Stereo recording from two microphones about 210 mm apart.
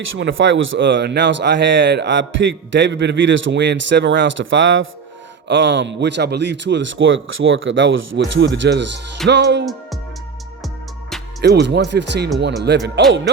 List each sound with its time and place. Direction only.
0.2 s speech: 60° right (ahead or behind)
11.4 s speech: 55° right (ahead or behind)